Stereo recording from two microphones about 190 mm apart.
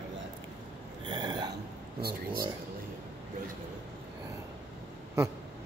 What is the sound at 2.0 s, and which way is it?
Speech, 55° right (ahead or behind).